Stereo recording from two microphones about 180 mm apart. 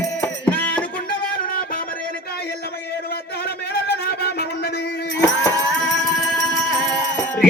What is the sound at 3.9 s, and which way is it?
Music, 60° left (ahead or behind).